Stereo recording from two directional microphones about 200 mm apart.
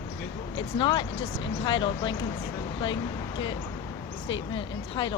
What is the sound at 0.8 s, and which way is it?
Speech, 25° left (ahead or behind).